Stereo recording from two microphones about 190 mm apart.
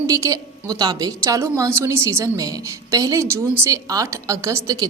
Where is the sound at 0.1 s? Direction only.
15° right (ahead or behind).